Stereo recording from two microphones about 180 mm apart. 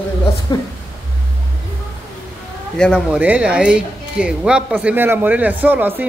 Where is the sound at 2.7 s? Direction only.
Centre (ahead or behind).